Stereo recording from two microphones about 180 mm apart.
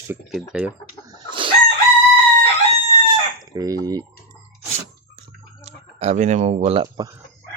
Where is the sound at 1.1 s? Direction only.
25° right (ahead or behind).